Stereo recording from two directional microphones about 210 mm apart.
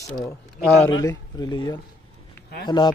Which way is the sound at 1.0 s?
20° left (ahead or behind).